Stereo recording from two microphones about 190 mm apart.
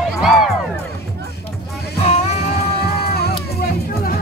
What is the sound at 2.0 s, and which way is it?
Music, 35° left (ahead or behind).